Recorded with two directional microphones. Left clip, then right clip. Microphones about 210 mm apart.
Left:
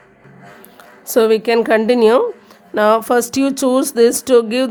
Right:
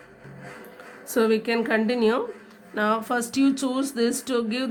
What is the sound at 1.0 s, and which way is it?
Speech, 50° left (ahead or behind).